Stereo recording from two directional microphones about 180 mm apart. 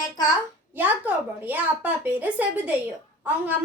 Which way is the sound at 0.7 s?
10° right (ahead or behind).